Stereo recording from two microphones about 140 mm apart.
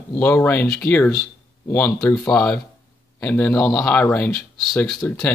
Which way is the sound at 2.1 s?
25° left (ahead or behind).